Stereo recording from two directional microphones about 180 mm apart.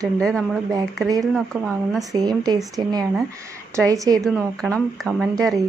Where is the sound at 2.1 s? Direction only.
20° right (ahead or behind).